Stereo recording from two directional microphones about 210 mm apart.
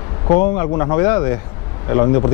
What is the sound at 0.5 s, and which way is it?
Speech, 15° left (ahead or behind).